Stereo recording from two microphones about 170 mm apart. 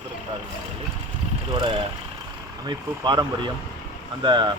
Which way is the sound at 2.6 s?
25° right (ahead or behind).